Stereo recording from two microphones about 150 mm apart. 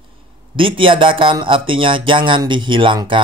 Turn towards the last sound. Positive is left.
turn(degrees=-35)  # may be behind; listen again after turning